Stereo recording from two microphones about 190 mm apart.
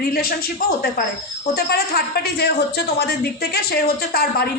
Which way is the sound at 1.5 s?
55° left (ahead or behind).